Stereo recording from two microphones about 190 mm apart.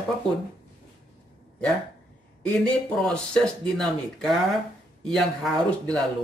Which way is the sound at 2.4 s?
5° left (ahead or behind).